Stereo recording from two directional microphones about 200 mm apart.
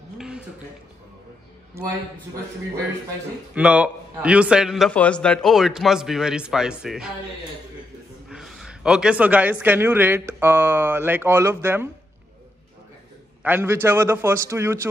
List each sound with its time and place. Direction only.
1.8 s speech: 15° right (ahead or behind)
3.5 s a man's voice: 5° right (ahead or behind)
8.3 s speech: centre (ahead or behind)
13.4 s speech: 10° right (ahead or behind)